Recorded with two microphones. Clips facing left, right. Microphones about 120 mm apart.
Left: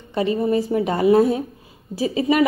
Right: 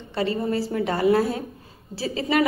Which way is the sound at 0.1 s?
20° left (ahead or behind).